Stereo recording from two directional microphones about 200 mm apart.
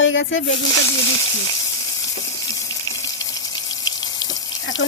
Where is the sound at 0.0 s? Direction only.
70° left (ahead or behind).